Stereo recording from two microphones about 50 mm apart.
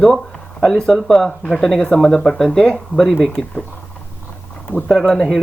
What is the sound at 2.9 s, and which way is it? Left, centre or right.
Speech, centre.